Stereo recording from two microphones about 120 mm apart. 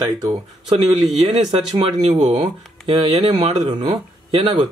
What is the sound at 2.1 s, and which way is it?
Speech, 65° right (ahead or behind).